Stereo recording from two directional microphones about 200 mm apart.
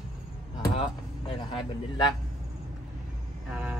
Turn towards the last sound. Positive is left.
turn(degrees=-5)  # may be behind; listen again after turning